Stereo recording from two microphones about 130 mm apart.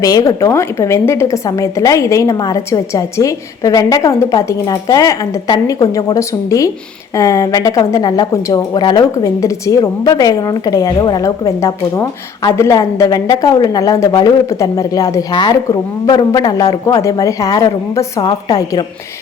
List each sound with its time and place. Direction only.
0.0 s speech: 30° left (ahead or behind)